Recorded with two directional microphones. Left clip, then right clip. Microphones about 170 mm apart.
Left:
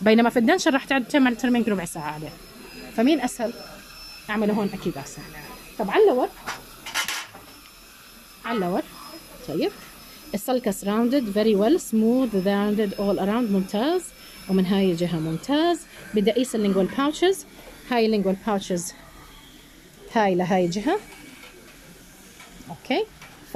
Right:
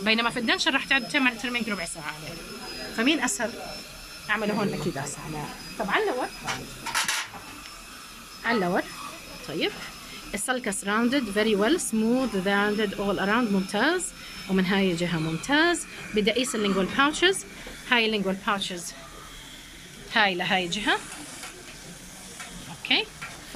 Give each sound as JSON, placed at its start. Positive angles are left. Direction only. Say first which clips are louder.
{"t": 0.0, "sound": "speech", "louder": "left 6 dB", "side_deg": 45}
{"t": 3.0, "sound": "speech", "louder": "left 3 dB", "side_deg": 30}
{"t": 8.5, "sound": "speech", "louder": "right 1 dB", "side_deg": 10}
{"t": 9.5, "sound": "speech", "louder": "left 3 dB", "side_deg": 25}
{"t": 18.4, "sound": "a woman's voice", "louder": "left 2 dB", "side_deg": 35}
{"t": 20.1, "sound": "a woman's voice", "louder": "left 2 dB", "side_deg": 35}
{"t": 22.8, "sound": "speech", "louder": "right 2 dB", "side_deg": 40}